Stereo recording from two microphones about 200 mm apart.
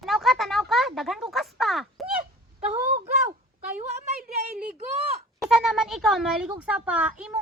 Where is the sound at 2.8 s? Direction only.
35° right (ahead or behind).